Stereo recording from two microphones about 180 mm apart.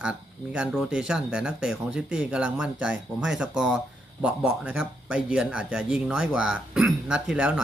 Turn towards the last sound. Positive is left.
turn(degrees=-5)  # may be behind; listen again after turning